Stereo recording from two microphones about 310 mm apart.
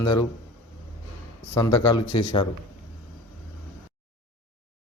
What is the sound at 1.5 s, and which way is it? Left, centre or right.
Speech, centre.